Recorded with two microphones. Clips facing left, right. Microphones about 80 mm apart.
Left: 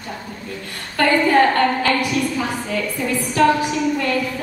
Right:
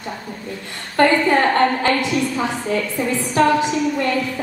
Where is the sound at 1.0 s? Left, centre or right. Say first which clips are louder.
Even; right.